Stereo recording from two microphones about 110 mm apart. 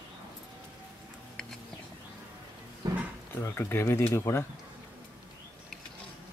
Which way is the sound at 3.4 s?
25° left (ahead or behind).